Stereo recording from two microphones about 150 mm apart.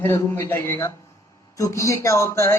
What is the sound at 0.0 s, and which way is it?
A man's voice, 15° left (ahead or behind).